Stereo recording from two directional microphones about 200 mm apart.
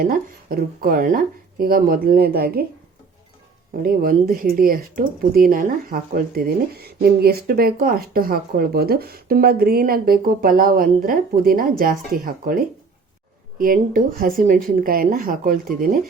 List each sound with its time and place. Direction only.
0.1 s a woman's voice: 50° right (ahead or behind)
3.8 s a woman's voice: 45° right (ahead or behind)